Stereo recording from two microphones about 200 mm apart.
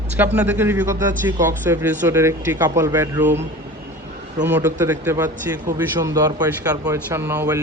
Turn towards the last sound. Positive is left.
turn(degrees=-15)  # may be behind; listen again after turning